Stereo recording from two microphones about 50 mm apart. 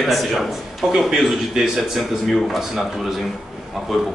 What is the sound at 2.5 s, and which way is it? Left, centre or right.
Speech, centre.